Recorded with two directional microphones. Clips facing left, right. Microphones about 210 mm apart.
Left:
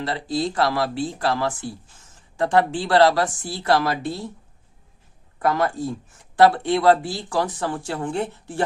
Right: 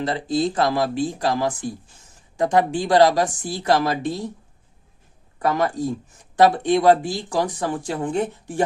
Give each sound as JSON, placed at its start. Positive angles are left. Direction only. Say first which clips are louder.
{"t": 0.0, "sound": "speech", "louder": "right 3 dB", "side_deg": -20}
{"t": 5.5, "sound": "speech", "louder": "right 1 dB", "side_deg": -15}